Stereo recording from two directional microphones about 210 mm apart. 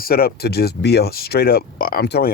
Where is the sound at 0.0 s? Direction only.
45° left (ahead or behind).